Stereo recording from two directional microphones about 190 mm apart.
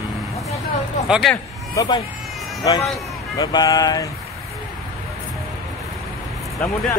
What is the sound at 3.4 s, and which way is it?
Speech, 20° left (ahead or behind).